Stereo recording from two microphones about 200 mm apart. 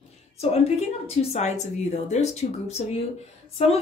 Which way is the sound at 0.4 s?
30° left (ahead or behind).